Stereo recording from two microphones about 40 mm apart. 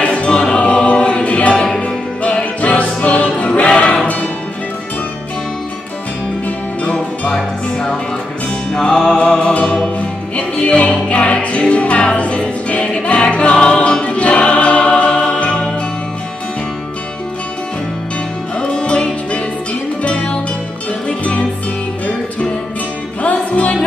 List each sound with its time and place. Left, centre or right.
0.0 s choir: left
1.0 s music: left
3.3 s choir: left
3.7 s music: left
6.4 s music: left
9.2 s music: left
18.6 s music: left
23.2 s music: left